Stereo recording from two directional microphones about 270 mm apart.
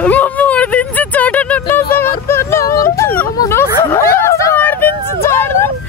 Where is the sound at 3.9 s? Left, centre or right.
Centre.